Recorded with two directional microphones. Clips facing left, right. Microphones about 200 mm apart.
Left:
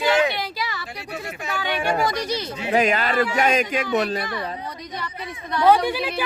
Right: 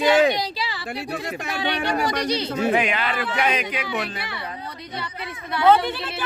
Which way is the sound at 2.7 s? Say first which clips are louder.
Left 7 dB; 40° left (ahead or behind).